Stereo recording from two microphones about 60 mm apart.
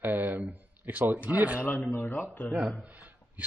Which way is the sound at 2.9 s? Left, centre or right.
Right.